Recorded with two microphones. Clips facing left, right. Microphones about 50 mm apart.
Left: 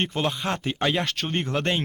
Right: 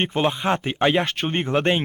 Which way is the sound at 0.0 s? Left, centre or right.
Right.